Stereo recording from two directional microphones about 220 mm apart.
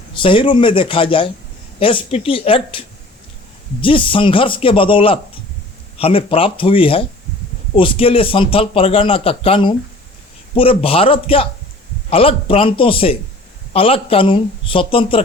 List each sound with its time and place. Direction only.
0.1 s a man's voice: 25° left (ahead or behind)